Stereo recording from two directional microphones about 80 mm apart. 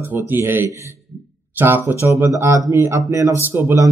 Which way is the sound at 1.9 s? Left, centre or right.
Right.